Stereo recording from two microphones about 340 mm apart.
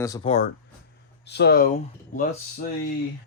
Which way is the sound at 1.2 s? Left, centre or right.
Left.